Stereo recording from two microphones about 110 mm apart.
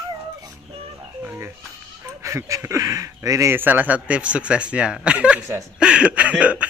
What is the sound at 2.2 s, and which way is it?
Speech, 25° right (ahead or behind).